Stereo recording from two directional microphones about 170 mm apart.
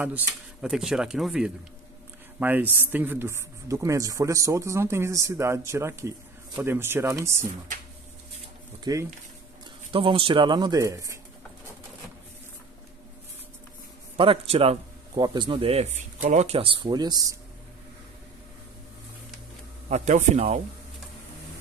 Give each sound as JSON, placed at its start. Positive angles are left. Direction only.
{"t": 0.0, "sound": "speech", "side_deg": -5}
{"t": 8.9, "sound": "speech", "side_deg": -20}
{"t": 14.1, "sound": "speech", "side_deg": -30}
{"t": 19.9, "sound": "speech", "side_deg": -45}